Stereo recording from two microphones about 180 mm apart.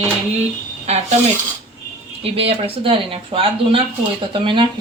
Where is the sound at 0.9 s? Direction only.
35° right (ahead or behind).